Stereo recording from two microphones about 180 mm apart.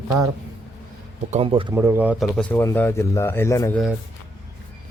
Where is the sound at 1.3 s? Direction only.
30° right (ahead or behind).